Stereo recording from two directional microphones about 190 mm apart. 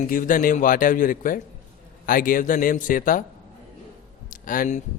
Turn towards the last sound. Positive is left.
turn(degrees=40)  # may be behind; listen again after turning